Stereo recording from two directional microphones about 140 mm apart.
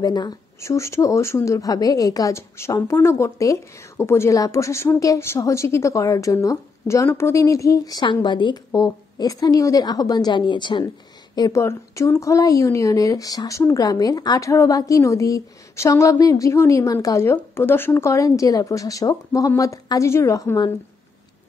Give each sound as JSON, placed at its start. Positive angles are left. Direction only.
{"t": 0.0, "sound": "speech", "side_deg": 30}